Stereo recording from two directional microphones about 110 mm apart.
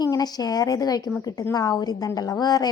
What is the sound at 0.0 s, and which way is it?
A woman's voice, 35° left (ahead or behind).